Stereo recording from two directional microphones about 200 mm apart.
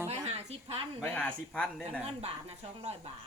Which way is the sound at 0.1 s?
30° right (ahead or behind).